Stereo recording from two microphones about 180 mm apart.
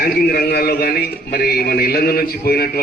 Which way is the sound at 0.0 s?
55° left (ahead or behind).